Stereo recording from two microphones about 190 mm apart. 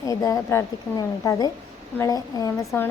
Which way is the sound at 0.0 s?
15° left (ahead or behind).